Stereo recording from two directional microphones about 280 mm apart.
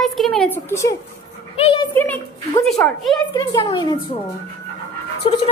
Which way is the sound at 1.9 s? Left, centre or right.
Centre.